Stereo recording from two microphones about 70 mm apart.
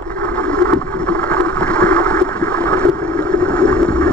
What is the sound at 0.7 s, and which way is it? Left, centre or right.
Boat, centre.